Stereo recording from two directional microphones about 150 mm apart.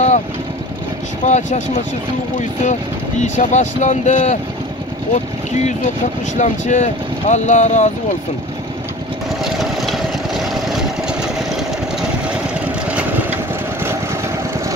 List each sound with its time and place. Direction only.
1.2 s speech: 50° left (ahead or behind)
2.6 s speech: 55° left (ahead or behind)
9.4 s vehicle: centre (ahead or behind)
12.5 s vehicle: 10° right (ahead or behind)